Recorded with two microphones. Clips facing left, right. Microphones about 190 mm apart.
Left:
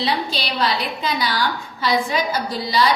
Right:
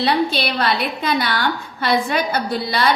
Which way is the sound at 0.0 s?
60° right (ahead or behind).